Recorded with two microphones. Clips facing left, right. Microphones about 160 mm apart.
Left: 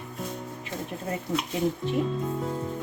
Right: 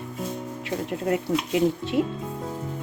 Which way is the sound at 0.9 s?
75° right (ahead or behind).